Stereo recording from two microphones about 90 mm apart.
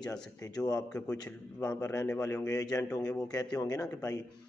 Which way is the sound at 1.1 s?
45° left (ahead or behind).